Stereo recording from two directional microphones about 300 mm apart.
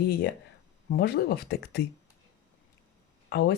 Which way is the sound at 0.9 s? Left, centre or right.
Left.